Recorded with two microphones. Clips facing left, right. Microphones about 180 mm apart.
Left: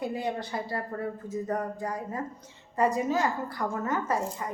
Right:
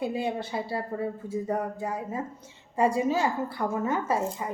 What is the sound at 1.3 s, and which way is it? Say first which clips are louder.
Speech: right 1 dB; 10° right (ahead or behind).